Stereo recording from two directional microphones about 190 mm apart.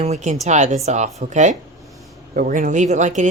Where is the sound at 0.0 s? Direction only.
35° right (ahead or behind).